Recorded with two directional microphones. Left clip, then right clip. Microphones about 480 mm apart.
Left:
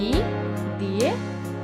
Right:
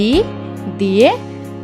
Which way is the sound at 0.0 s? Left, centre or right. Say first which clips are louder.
Right 10 dB; centre.